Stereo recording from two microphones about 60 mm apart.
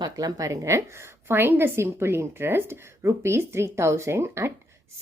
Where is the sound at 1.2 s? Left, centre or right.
Right.